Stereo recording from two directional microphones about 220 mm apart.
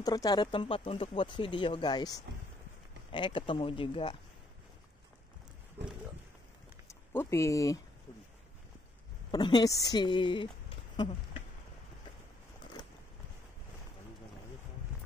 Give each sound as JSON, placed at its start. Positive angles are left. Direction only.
{"t": 0.0, "sound": "speech", "side_deg": 15}
{"t": 6.9, "sound": "speech", "side_deg": 10}
{"t": 9.3, "sound": "speech", "side_deg": 20}
{"t": 12.8, "sound": "a sound", "side_deg": 20}